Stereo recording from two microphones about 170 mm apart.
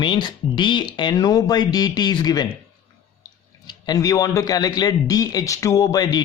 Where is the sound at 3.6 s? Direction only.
25° left (ahead or behind).